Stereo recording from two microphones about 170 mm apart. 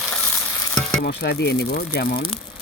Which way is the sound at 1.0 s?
75° left (ahead or behind).